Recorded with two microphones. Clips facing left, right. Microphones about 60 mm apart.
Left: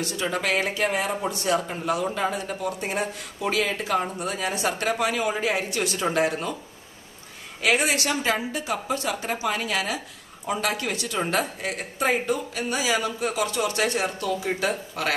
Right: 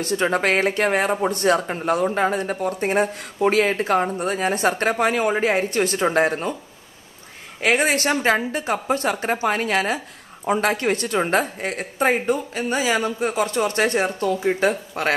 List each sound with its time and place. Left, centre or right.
0.0 s speech: right
7.6 s speech: right